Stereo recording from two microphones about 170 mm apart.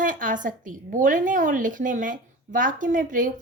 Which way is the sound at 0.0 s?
50° right (ahead or behind).